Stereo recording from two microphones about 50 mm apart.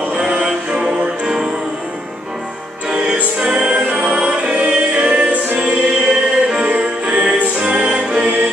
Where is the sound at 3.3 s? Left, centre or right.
Centre.